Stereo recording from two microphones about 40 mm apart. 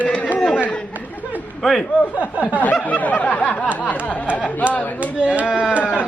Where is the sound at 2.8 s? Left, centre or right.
Left.